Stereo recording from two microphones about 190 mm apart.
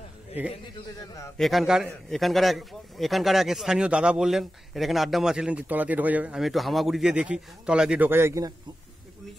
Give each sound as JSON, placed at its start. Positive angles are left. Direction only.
{"t": 0.9, "sound": "a man's voice", "side_deg": 15}
{"t": 1.4, "sound": "a man's voice", "side_deg": 0}